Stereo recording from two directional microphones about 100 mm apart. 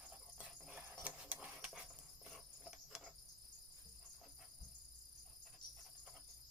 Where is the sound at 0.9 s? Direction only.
20° right (ahead or behind).